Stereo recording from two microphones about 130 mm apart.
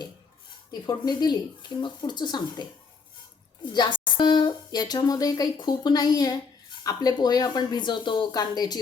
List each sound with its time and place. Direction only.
0.7 s a woman's voice: 30° left (ahead or behind)
3.7 s a woman's voice: 35° left (ahead or behind)